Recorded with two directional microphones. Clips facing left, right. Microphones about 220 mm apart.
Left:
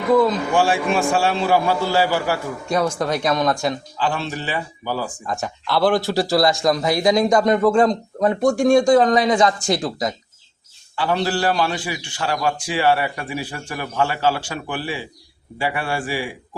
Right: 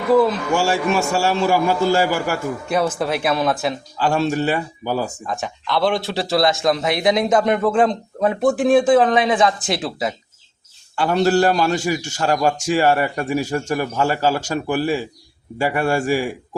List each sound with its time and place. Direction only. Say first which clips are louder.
0.1 s speech: right 1 dB; 5° right (ahead or behind)
0.9 s a man's voice: even; 45° right (ahead or behind)
2.6 s speech: even; 5° right (ahead or behind)
4.0 s a man's voice: right 6 dB; 45° right (ahead or behind)
5.2 s speech: even; centre (ahead or behind)
10.9 s a man's voice: right 5 dB; 45° right (ahead or behind)